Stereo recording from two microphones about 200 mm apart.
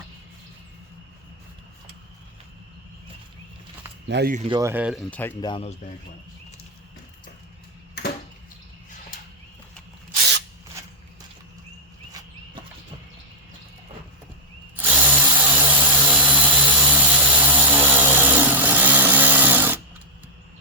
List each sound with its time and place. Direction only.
4.1 s speech: 50° right (ahead or behind)
4.4 s speech: 25° right (ahead or behind)
4.6 s speech: 10° right (ahead or behind)
5.1 s speech: 10° left (ahead or behind)
5.4 s speech: 25° left (ahead or behind)
14.8 s tools: 10° right (ahead or behind)